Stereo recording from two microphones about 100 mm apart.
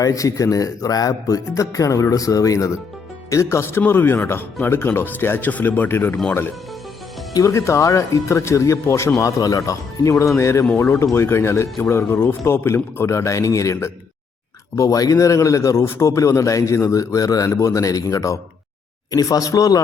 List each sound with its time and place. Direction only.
0.0 s a man's voice: 35° left (ahead or behind)
7.3 s a man's voice: 30° left (ahead or behind)